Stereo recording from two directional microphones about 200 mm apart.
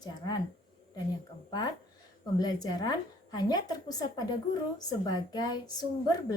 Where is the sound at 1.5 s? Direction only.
20° left (ahead or behind).